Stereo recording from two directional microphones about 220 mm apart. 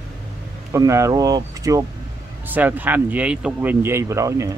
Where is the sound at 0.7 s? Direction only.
15° right (ahead or behind).